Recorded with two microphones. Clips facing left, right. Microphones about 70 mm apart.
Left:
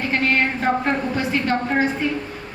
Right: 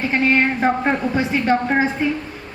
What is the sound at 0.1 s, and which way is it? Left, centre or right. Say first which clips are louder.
A woman's voice: right 3 dB; centre.